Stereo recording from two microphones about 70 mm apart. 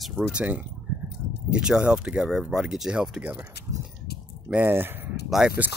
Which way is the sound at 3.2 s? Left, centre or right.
Right.